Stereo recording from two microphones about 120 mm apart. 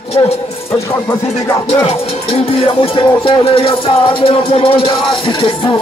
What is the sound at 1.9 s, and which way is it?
Speech, 50° left (ahead or behind).